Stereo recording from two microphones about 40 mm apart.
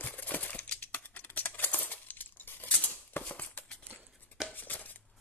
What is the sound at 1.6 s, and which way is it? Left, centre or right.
Coin, left.